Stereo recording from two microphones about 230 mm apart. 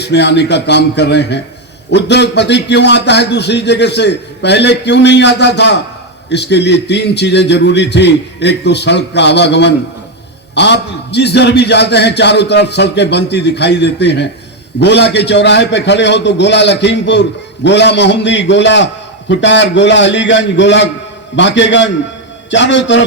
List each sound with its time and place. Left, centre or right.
0.1 s a man's voice: left